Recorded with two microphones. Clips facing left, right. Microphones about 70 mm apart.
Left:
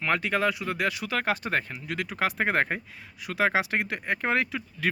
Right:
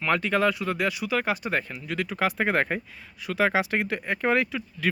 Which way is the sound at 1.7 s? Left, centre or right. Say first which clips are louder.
Right 2 dB; left.